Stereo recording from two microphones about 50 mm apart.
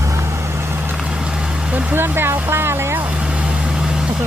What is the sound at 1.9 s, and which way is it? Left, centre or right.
Vehicle, right.